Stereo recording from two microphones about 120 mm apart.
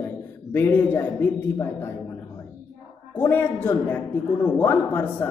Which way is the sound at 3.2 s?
15° left (ahead or behind).